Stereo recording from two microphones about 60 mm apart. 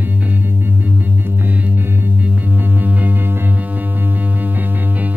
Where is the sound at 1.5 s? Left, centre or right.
Right.